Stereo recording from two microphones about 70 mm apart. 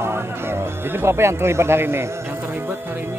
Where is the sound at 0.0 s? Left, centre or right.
Right.